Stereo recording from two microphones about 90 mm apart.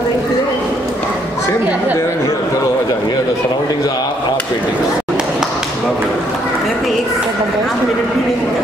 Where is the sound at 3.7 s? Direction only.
50° left (ahead or behind).